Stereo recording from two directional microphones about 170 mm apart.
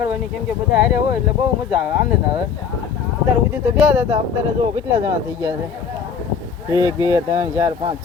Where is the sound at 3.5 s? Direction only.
10° right (ahead or behind).